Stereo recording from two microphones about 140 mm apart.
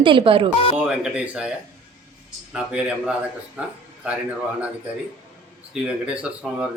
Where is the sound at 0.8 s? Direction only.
10° right (ahead or behind).